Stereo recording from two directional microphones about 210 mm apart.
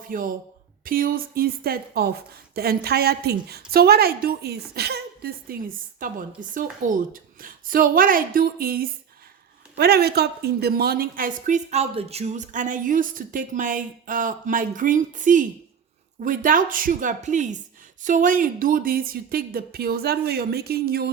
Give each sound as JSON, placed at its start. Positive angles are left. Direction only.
{"t": 0.0, "sound": "a woman's voice", "side_deg": -40}